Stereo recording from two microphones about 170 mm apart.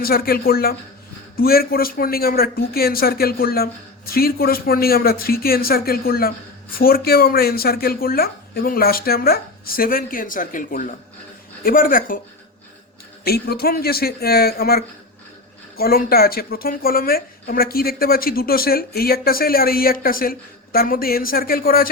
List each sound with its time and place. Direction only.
0.0 s speech: 60° left (ahead or behind)
13.2 s speech: 65° left (ahead or behind)